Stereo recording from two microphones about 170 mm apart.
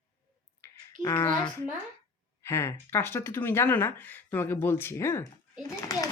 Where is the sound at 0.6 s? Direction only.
15° left (ahead or behind).